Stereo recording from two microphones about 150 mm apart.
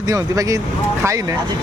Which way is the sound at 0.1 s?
20° right (ahead or behind).